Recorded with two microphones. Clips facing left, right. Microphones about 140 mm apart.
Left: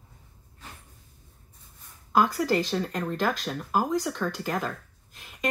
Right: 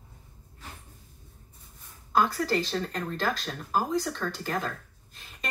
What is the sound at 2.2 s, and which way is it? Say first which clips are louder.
Speech: left 2 dB; 15° left (ahead or behind).